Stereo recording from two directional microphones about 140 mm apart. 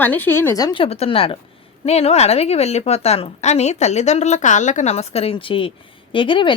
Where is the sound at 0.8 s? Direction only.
45° left (ahead or behind).